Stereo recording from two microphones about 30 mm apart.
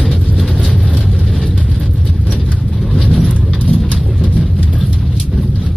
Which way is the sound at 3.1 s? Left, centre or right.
Left.